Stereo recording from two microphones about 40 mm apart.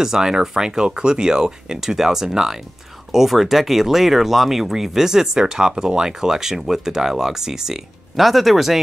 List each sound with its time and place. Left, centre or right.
0.0 s speech: centre